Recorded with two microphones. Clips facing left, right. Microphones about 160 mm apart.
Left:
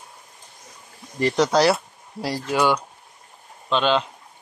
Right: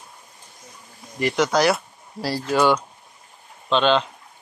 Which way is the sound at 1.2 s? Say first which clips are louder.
Left 1 dB; 35° left (ahead or behind).